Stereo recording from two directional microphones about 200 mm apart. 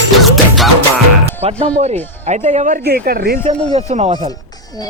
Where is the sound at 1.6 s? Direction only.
35° right (ahead or behind); by 3.4 s 50° right (ahead or behind).